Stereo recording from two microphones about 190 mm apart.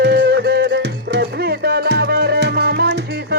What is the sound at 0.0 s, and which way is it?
Music, 55° right (ahead or behind).